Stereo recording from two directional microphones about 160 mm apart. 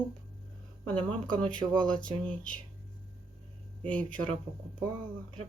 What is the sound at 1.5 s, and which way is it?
Speech, 5° left (ahead or behind).